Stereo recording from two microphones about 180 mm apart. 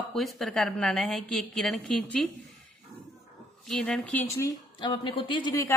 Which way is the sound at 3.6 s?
5° left (ahead or behind).